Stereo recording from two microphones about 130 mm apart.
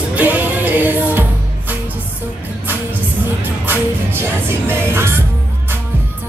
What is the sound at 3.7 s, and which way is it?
Music, 15° right (ahead or behind).